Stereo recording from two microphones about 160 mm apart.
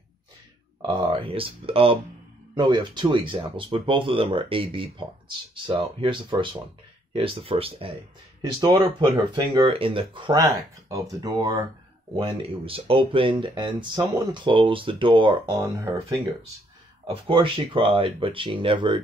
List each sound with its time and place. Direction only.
0.8 s speech: 30° right (ahead or behind)
10.4 s speech: 20° right (ahead or behind)
12.2 s speech: 35° right (ahead or behind)
17.1 s speech: 30° right (ahead or behind)